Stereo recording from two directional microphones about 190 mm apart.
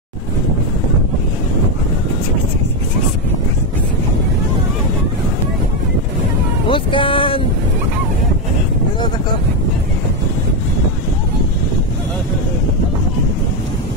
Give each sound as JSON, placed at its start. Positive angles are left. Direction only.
{"t": 6.7, "sound": "speech", "side_deg": 25}